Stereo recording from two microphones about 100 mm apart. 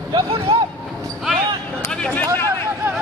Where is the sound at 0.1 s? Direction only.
55° right (ahead or behind).